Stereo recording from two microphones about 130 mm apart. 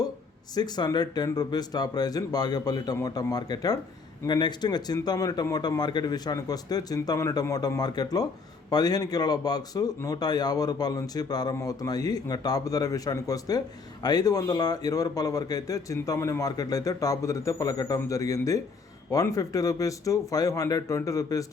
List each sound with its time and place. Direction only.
0.5 s speech: 30° left (ahead or behind)